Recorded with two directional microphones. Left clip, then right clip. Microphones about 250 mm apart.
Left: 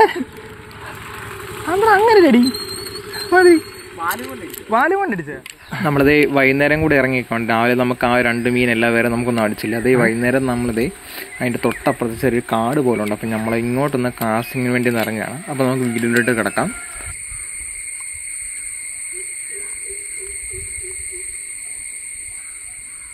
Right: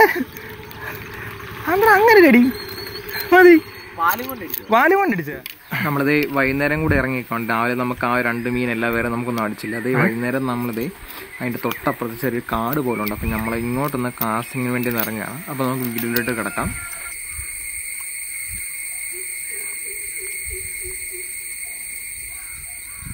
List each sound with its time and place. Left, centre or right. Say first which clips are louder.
1.7 s speech: even; centre
2.4 s a sound: left 2 dB; left
3.1 s a sound: right 1 dB; centre
4.0 s speech: right 3 dB; right
4.6 s speech: right 1 dB; centre
5.7 s speech: left 5 dB; centre